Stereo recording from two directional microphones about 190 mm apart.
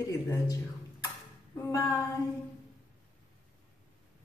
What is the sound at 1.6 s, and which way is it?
Speech, 15° left (ahead or behind).